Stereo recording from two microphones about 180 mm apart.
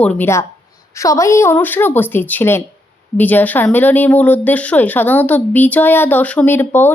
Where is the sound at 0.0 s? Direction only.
10° left (ahead or behind).